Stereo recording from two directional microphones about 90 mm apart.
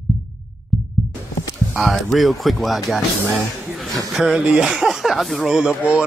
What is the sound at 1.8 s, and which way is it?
Speech, centre (ahead or behind).